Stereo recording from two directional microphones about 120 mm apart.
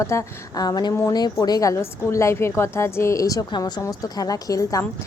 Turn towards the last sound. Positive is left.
turn(degrees=30)  # may be behind; listen again after turning